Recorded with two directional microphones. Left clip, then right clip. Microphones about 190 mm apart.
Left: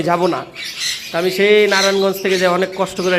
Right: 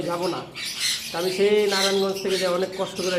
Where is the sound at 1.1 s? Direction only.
25° left (ahead or behind).